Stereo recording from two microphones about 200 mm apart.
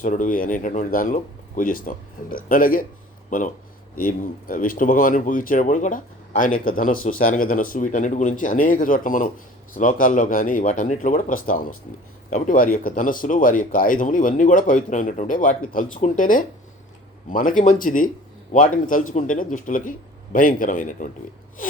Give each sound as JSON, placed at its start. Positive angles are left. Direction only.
{"t": 0.0, "sound": "speech", "side_deg": 40}
{"t": 19.1, "sound": "speech", "side_deg": 40}